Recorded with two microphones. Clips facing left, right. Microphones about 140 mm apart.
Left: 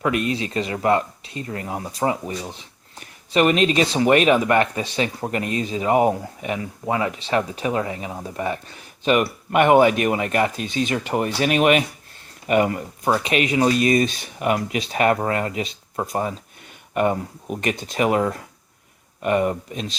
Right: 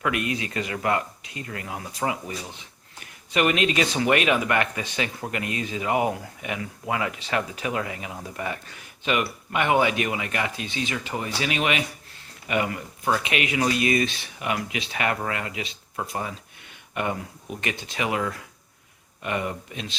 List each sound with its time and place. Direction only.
0.0 s speech: 30° left (ahead or behind)
3.3 s speech: 30° left (ahead or behind)
9.5 s speech: 50° left (ahead or behind)